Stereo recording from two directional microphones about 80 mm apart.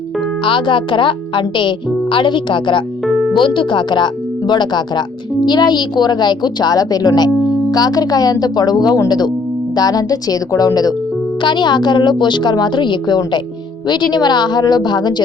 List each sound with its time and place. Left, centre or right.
0.4 s a woman's voice: left
11.4 s a woman's voice: left